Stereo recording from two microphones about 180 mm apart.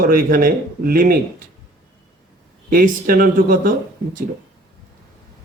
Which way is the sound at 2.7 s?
50° right (ahead or behind).